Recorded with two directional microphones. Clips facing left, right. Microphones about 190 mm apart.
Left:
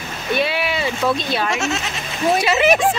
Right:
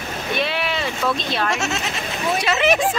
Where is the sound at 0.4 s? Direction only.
5° left (ahead or behind).